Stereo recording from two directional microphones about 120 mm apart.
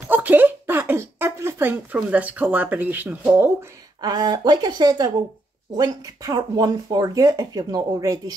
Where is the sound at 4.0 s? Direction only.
35° right (ahead or behind).